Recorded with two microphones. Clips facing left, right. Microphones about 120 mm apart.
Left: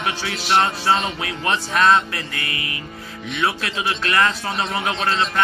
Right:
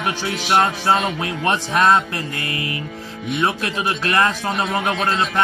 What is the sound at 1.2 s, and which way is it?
Speech, 35° right (ahead or behind).